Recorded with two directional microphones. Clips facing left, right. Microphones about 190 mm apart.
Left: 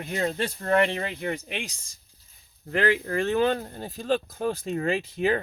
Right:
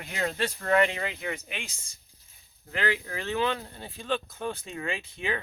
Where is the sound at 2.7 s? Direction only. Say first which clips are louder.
Left 7 dB; 50° left (ahead or behind).